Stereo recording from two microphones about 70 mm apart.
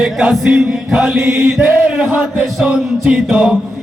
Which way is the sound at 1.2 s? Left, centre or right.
Right.